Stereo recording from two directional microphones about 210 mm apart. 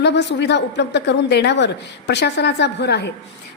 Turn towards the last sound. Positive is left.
turn(degrees=55)  # may be behind; listen again after turning